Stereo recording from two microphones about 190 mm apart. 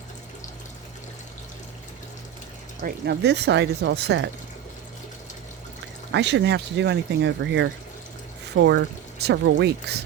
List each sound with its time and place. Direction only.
2.8 s speech: 60° right (ahead or behind)
6.1 s speech: 65° right (ahead or behind)